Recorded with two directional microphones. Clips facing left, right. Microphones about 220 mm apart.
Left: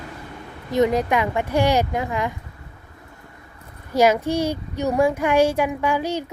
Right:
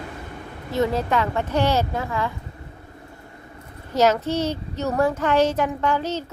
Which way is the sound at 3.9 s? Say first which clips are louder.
Left 2 dB; 10° left (ahead or behind).